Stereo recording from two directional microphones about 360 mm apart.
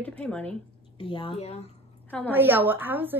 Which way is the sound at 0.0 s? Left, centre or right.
Centre.